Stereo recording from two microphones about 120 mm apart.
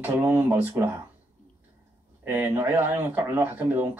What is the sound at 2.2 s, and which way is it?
Speech, 15° right (ahead or behind).